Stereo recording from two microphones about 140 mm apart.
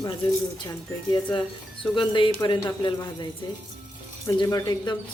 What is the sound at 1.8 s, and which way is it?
A woman's voice, 35° left (ahead or behind).